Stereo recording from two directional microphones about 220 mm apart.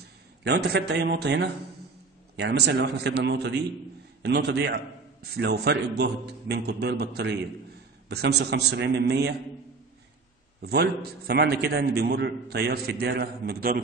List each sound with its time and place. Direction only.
0.0 s a man's voice: 50° right (ahead or behind)
10.6 s a man's voice: 45° right (ahead or behind)